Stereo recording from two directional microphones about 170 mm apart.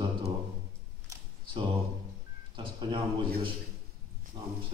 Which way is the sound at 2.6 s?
30° right (ahead or behind).